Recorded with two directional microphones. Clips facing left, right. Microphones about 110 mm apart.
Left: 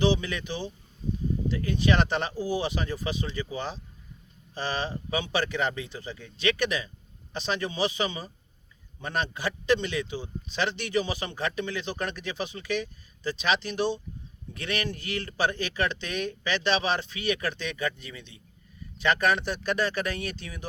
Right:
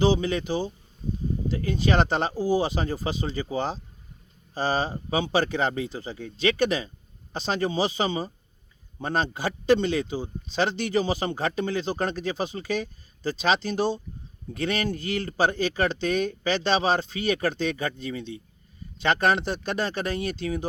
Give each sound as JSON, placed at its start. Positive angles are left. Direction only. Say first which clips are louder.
{"t": 0.0, "sound": "speech", "louder": "right 3 dB", "side_deg": -35}